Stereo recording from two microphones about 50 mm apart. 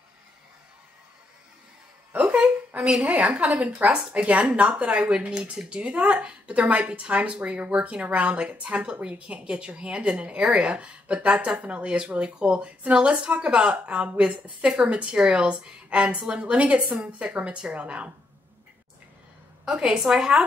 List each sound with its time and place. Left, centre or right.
2.8 s speech: right
19.6 s a woman's voice: centre